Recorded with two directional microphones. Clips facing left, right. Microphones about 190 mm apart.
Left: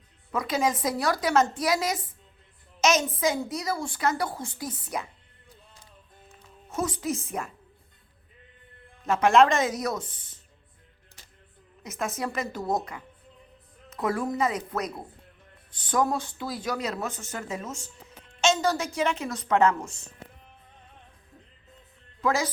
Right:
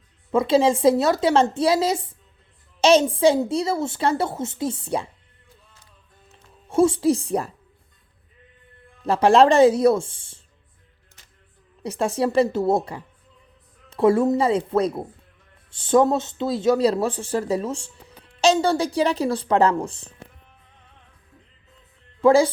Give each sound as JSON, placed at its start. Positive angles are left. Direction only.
{"t": 0.3, "sound": "a woman's voice", "side_deg": -30}
{"t": 6.7, "sound": "speech", "side_deg": -30}
{"t": 9.0, "sound": "speech", "side_deg": -35}
{"t": 11.8, "sound": "a woman's voice", "side_deg": -30}
{"t": 22.2, "sound": "a woman's voice", "side_deg": -30}